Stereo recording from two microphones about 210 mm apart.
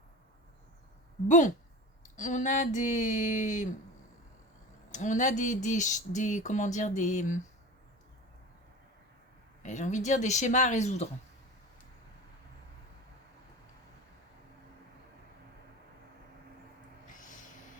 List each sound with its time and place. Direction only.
1.3 s speech: 35° left (ahead or behind)
4.9 s speech: 35° left (ahead or behind)
9.6 s speech: 35° left (ahead or behind)
17.1 s snort: 40° left (ahead or behind)